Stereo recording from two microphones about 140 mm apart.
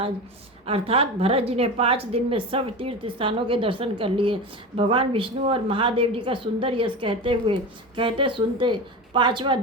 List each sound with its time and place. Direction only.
0.6 s a woman's voice: 45° right (ahead or behind)